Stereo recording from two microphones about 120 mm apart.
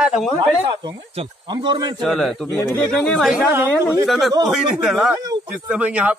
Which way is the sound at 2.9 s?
5° left (ahead or behind).